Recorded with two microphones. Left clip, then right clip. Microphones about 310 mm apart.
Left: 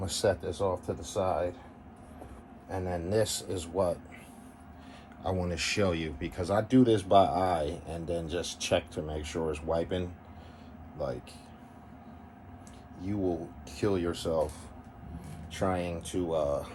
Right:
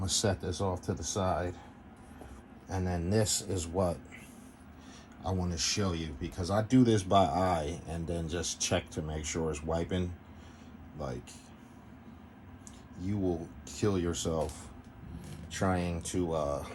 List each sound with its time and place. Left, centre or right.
0.0 s speech: right
2.7 s speech: right
5.2 s speech: centre
6.3 s speech: centre
13.0 s speech: right
15.5 s speech: right